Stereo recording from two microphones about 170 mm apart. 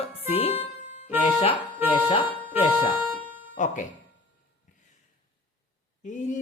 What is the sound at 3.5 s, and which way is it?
Speech, 45° left (ahead or behind).